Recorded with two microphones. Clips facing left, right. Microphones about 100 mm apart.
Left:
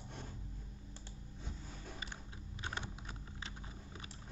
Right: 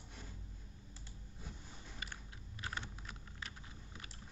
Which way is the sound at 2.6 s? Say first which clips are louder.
Left 1 dB; 25° left (ahead or behind).